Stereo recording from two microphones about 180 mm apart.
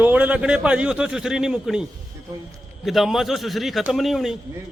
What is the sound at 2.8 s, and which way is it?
A man's voice, centre (ahead or behind).